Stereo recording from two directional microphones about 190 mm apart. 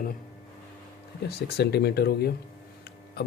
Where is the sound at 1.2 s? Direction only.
60° left (ahead or behind).